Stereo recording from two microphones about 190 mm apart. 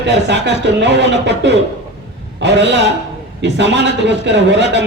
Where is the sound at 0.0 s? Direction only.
70° right (ahead or behind).